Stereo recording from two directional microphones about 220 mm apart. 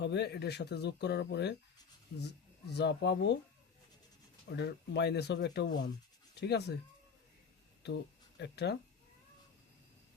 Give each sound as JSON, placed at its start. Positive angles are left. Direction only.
{"t": 0.0, "sound": "speech", "side_deg": 50}
{"t": 2.6, "sound": "speech", "side_deg": 50}
{"t": 4.4, "sound": "speech", "side_deg": 50}
{"t": 7.8, "sound": "speech", "side_deg": 50}